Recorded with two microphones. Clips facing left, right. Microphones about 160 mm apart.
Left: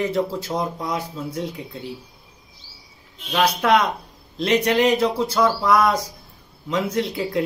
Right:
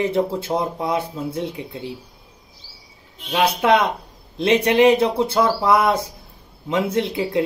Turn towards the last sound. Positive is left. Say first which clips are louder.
# right 2 dB
turn(degrees=-25)  # may be behind; listen again after turning